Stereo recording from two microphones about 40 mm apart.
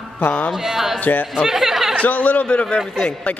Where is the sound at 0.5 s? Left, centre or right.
Centre.